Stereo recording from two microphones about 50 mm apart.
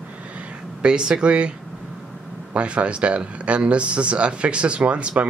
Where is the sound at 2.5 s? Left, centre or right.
Right.